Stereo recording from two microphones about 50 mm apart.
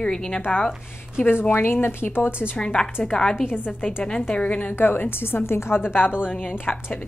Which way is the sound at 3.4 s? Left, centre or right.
Left.